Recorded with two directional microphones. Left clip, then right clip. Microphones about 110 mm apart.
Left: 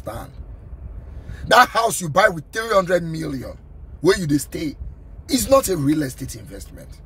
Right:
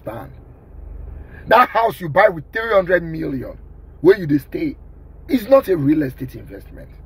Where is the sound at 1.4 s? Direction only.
45° left (ahead or behind).